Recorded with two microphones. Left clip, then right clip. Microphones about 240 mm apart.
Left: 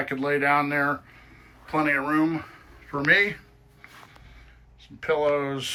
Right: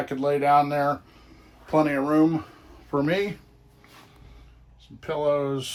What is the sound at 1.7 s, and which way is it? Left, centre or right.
Speech, right.